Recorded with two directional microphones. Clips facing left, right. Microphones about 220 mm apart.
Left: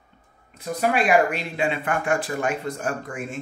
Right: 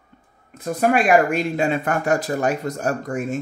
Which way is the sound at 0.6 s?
45° right (ahead or behind).